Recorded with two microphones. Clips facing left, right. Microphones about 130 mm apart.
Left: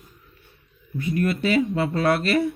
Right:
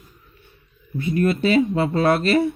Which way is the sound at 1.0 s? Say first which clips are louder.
Right 3 dB; 25° right (ahead or behind).